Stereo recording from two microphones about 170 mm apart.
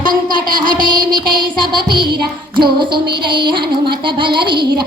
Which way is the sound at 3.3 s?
30° right (ahead or behind).